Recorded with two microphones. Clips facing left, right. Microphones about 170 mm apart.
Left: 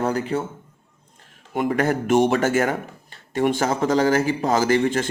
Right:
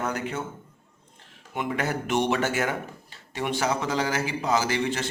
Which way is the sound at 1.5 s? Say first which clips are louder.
Left 7 dB; 45° left (ahead or behind).